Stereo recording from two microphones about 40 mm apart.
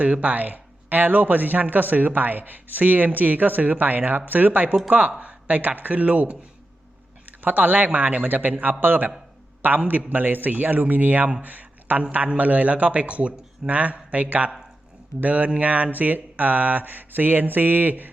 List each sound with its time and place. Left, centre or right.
0.0 s speech: right
4.9 s a man's voice: right
7.4 s a man's voice: right
11.4 s a sound: right
12.1 s a man's voice: right